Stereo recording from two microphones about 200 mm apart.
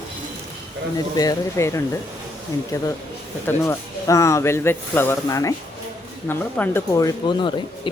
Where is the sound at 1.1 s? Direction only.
20° left (ahead or behind).